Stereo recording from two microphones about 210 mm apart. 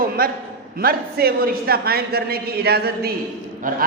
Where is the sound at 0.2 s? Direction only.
45° right (ahead or behind).